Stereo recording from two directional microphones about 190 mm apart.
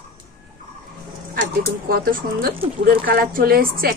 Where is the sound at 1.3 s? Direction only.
55° right (ahead or behind).